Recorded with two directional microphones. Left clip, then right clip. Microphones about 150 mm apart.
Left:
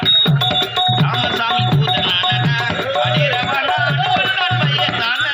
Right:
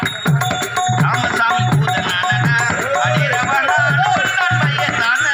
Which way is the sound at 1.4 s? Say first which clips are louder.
Right 1 dB; 35° left (ahead or behind).